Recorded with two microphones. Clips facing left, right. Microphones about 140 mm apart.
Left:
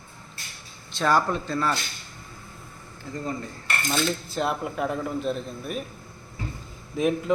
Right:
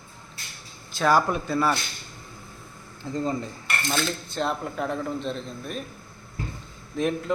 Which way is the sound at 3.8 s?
10° left (ahead or behind).